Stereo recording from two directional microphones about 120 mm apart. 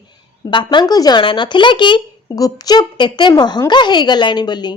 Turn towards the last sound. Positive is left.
turn(degrees=35)  # may be behind; listen again after turning